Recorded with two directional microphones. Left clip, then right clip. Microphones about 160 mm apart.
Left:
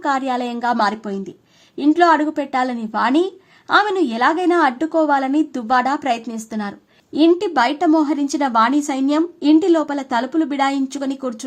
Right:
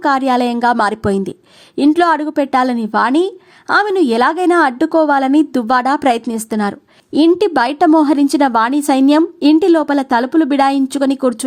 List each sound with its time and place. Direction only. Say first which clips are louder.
0.0 s a woman's voice: right 6 dB; 35° right (ahead or behind)